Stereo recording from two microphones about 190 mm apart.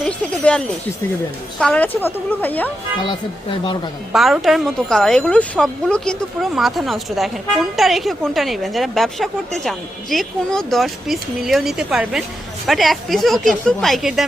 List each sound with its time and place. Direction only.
0.0 s a woman's voice: 5° left (ahead or behind)
3.1 s speech: 25° left (ahead or behind)
4.1 s a woman's voice: centre (ahead or behind)